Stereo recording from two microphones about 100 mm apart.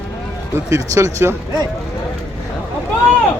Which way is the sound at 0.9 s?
30° right (ahead or behind).